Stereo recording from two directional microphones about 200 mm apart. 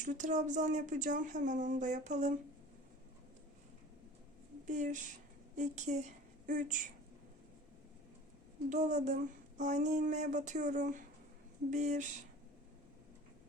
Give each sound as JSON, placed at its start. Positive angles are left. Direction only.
{"t": 0.0, "sound": "speech", "side_deg": -40}
{"t": 4.6, "sound": "a woman's voice", "side_deg": -40}
{"t": 8.7, "sound": "speech", "side_deg": -35}